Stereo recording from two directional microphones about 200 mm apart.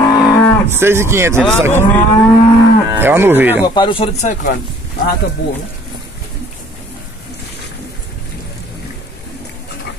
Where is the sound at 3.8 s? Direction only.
25° left (ahead or behind).